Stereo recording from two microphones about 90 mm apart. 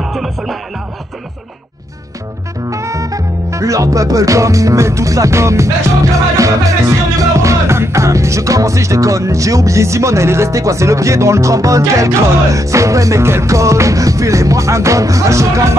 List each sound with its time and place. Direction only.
0.0 s music: centre (ahead or behind)
2.7 s music: 35° right (ahead or behind)